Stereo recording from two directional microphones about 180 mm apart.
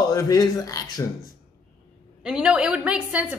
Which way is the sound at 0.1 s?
20° left (ahead or behind).